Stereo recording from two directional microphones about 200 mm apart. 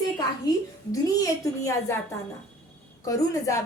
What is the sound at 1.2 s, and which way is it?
Speech, 15° left (ahead or behind).